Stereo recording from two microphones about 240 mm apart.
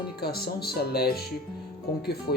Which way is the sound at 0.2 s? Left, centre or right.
Left.